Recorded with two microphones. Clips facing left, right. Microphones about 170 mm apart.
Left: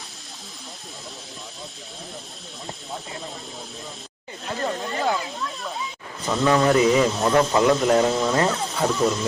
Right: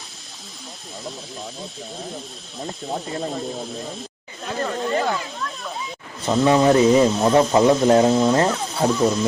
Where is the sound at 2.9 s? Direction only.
50° right (ahead or behind).